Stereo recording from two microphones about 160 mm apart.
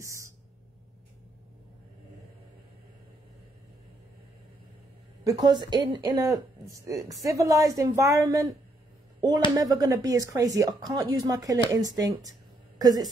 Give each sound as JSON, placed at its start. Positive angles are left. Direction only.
{"t": 0.0, "sound": "a sound", "side_deg": -20}
{"t": 5.2, "sound": "speech", "side_deg": -25}
{"t": 9.6, "sound": "a woman's voice", "side_deg": -25}